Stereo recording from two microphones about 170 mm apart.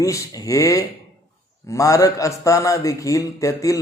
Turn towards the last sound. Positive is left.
turn(degrees=20)  # may be behind; listen again after turning